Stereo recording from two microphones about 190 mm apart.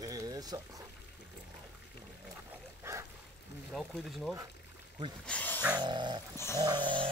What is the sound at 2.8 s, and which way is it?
Boat, 15° right (ahead or behind).